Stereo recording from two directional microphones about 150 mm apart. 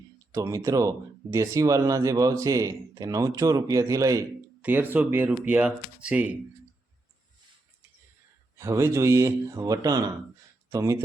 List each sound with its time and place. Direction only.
0.3 s speech: 20° right (ahead or behind)
8.5 s speech: 20° right (ahead or behind)